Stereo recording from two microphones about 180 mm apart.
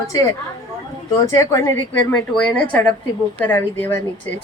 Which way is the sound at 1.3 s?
15° left (ahead or behind).